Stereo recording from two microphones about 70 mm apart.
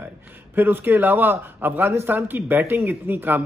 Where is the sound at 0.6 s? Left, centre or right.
Right.